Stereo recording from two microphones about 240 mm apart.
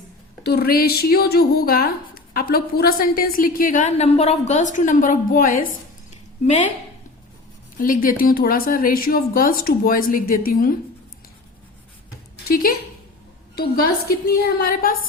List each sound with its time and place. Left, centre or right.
0.4 s speech: left
7.8 s speech: left
12.5 s speech: left